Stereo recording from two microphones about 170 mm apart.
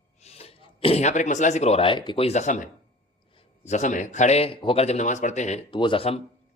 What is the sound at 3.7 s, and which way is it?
A man's voice, 45° left (ahead or behind).